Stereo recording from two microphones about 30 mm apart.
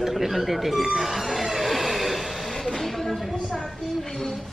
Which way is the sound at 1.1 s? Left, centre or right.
Centre.